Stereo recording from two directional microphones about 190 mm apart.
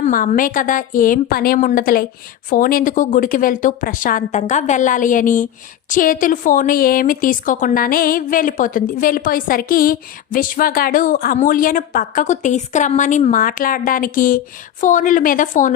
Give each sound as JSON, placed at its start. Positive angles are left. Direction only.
{"t": 0.0, "sound": "a woman's voice", "side_deg": 40}